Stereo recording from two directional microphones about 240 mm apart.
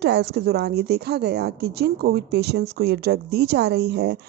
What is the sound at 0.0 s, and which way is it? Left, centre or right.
A woman's voice, right.